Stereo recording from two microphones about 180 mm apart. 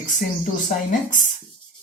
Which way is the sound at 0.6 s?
45° left (ahead or behind).